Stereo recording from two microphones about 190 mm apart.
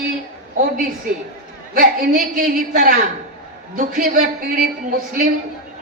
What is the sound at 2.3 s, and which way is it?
A man's voice, 50° right (ahead or behind).